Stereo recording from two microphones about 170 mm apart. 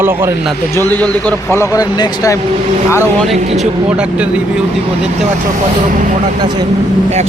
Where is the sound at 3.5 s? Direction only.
5° right (ahead or behind).